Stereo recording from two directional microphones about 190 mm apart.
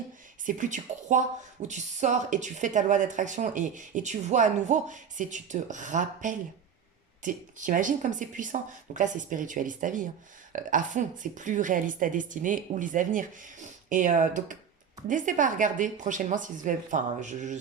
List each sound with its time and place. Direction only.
0.4 s a woman's voice: 40° right (ahead or behind)